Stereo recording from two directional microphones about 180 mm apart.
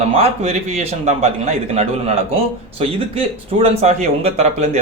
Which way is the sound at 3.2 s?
35° right (ahead or behind).